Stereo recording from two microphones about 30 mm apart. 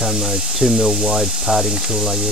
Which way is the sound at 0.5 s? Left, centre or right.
Centre.